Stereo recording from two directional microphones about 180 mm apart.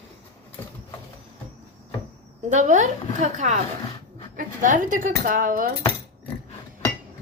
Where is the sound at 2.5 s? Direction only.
40° right (ahead or behind).